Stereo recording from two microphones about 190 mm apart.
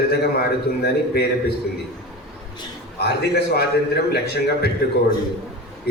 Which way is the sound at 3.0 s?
60° left (ahead or behind).